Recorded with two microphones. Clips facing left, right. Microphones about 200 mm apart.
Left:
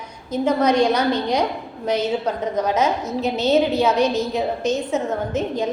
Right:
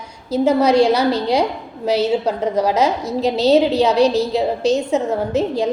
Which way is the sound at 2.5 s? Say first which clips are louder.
Right 2 dB; 35° right (ahead or behind).